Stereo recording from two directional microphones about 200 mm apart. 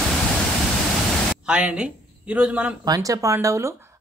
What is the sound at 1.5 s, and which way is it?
Speech, 5° right (ahead or behind).